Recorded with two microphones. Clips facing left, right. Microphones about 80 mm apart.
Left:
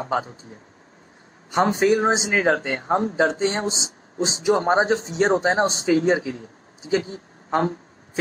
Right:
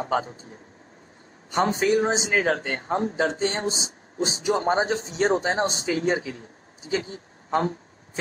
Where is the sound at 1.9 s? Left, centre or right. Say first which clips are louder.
Left 2 dB; left.